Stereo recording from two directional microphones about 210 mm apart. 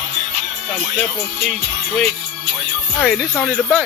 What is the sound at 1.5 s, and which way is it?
Speech, centre (ahead or behind).